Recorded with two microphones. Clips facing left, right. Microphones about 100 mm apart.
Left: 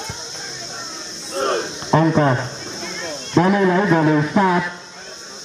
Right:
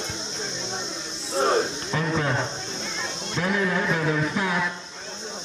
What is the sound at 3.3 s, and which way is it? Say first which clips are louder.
Speech: left 10 dB; 80° left.